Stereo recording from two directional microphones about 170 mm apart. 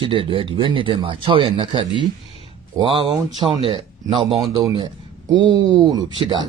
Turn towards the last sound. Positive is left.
turn(degrees=-25)  # may be behind; listen again after turning